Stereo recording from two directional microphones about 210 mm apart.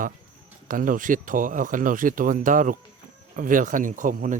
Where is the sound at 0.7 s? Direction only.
40° right (ahead or behind).